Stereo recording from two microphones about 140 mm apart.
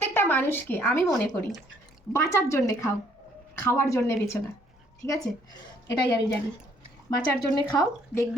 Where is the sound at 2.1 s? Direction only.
20° left (ahead or behind).